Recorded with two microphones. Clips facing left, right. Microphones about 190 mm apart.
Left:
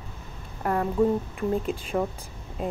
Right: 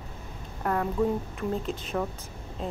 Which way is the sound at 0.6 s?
5° left (ahead or behind).